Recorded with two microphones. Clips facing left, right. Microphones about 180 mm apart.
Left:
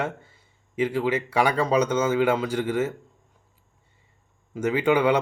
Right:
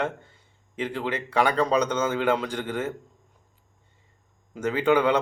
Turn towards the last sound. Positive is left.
turn(degrees=10)  # may be behind; listen again after turning